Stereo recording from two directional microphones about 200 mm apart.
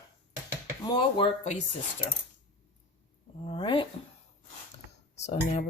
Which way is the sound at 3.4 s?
25° left (ahead or behind).